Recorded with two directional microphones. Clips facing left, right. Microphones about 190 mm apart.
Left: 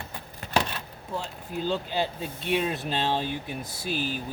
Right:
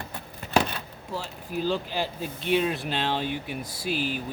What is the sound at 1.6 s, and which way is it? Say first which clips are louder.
Speech: left 1 dB; 20° left (ahead or behind).